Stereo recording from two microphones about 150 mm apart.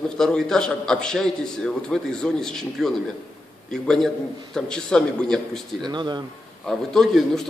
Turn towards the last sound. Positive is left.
turn(degrees=0)  # may be behind; listen again after turning